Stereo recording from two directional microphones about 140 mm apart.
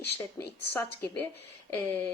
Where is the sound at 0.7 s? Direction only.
15° left (ahead or behind).